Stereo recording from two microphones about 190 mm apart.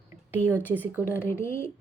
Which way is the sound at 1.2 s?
15° left (ahead or behind).